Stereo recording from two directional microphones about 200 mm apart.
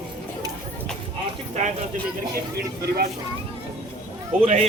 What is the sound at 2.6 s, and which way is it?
Speech, 50° right (ahead or behind).